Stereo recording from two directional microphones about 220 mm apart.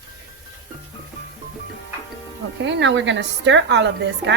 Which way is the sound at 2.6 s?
55° right (ahead or behind).